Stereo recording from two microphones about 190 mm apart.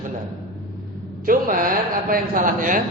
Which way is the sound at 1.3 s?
45° right (ahead or behind).